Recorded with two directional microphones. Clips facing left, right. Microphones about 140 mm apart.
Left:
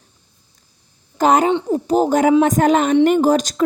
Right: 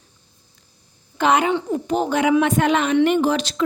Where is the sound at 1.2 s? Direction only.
40° left (ahead or behind).